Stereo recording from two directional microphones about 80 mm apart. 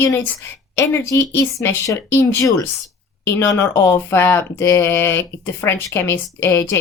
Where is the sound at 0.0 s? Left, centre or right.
Left.